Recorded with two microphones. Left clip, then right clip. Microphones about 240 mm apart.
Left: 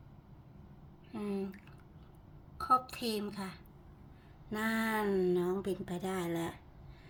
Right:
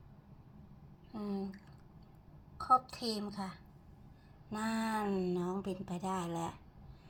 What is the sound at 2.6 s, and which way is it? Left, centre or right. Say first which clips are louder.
A woman's voice: even; centre.